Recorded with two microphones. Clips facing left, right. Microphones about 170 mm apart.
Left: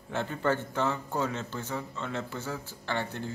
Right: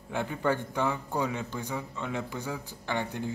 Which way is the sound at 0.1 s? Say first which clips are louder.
Even; 10° right (ahead or behind).